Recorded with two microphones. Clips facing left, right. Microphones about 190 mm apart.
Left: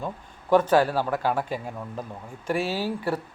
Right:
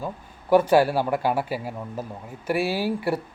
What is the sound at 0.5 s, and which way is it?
Speech, 10° right (ahead or behind).